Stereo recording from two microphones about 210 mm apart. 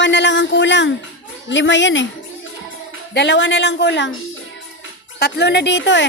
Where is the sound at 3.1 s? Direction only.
55° left (ahead or behind).